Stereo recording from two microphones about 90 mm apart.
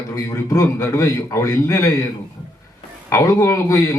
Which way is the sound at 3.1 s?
35° left (ahead or behind).